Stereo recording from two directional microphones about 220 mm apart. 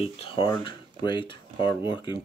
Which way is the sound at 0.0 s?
25° left (ahead or behind).